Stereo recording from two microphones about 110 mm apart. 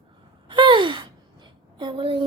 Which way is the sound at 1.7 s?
50° right (ahead or behind).